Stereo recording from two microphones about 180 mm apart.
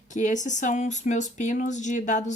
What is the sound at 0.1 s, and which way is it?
Speech, 45° left (ahead or behind).